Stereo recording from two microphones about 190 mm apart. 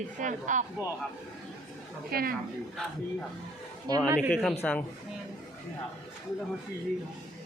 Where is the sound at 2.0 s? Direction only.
50° right (ahead or behind).